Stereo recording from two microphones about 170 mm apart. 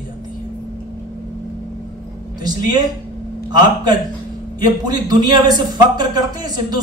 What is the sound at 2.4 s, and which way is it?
Speech, 25° right (ahead or behind).